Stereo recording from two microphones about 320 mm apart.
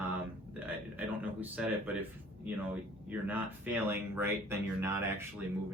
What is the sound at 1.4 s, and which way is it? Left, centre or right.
Speech, centre.